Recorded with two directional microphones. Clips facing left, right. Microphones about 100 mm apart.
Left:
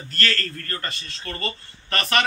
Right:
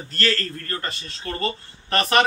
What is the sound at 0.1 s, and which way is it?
A man's voice, 20° right (ahead or behind).